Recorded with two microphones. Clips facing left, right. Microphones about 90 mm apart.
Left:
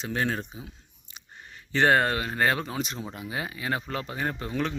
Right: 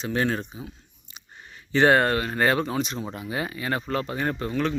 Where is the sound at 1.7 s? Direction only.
5° right (ahead or behind).